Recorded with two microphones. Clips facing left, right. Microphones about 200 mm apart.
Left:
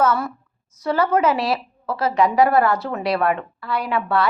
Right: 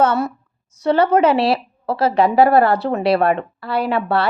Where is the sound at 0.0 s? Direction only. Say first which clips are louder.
Right 3 dB; 25° right (ahead or behind).